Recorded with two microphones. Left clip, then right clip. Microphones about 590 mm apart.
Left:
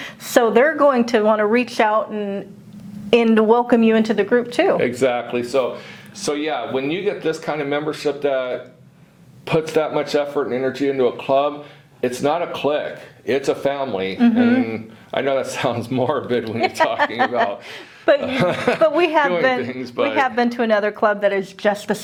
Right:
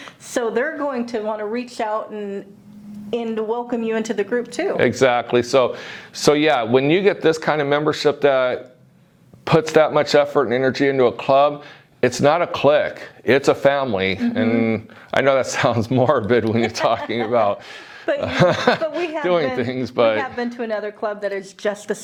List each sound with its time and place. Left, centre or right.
0.0 s a woman's voice: centre
4.8 s speech: right
6.1 s speech: right
9.4 s speech: right
18.2 s speech: right
18.8 s a woman's voice: left
19.5 s speech: right
20.1 s a woman's voice: centre